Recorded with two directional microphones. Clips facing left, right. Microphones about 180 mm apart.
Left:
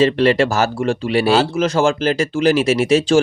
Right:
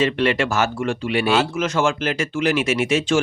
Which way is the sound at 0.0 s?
35° left (ahead or behind).